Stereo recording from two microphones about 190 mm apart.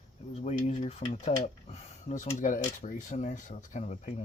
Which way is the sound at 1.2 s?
35° left (ahead or behind).